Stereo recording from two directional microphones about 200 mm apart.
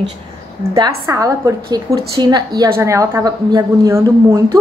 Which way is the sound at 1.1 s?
15° right (ahead or behind).